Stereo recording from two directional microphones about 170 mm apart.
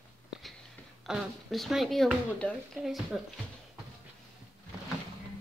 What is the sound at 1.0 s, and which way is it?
A woman's voice, centre (ahead or behind).